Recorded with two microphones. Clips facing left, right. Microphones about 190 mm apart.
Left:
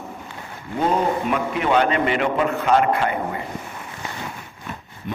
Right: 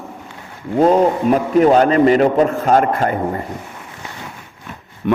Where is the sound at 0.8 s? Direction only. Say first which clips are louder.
Right 8 dB; 35° right (ahead or behind).